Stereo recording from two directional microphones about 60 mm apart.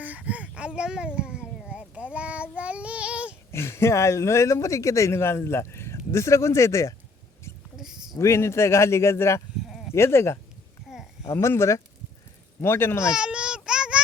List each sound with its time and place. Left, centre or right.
0.0 s a sound: right
3.5 s speech: left
7.5 s rodents: left
8.2 s speech: left
9.6 s sheep: centre
9.9 s speech: left
10.9 s a sound: centre
11.3 s speech: left
13.1 s a sound: centre